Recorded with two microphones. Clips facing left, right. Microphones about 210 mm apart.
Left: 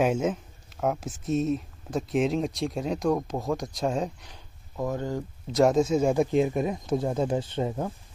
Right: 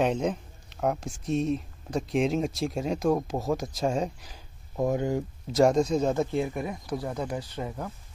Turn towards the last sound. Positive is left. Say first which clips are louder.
# left 6 dB
turn(degrees=25)  # may be behind; listen again after turning